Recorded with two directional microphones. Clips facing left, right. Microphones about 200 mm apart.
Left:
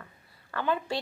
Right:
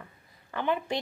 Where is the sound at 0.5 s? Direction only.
20° right (ahead or behind).